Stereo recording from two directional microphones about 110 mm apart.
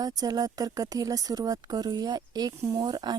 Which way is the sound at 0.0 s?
35° right (ahead or behind).